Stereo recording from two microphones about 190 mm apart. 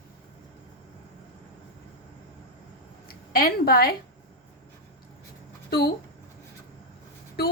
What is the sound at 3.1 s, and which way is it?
Speech, 50° left (ahead or behind).